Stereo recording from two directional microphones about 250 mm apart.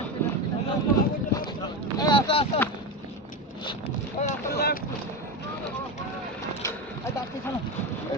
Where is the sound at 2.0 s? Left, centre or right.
Centre.